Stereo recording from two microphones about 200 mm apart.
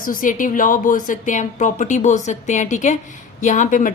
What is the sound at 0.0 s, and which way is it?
A woman's voice, 45° left (ahead or behind).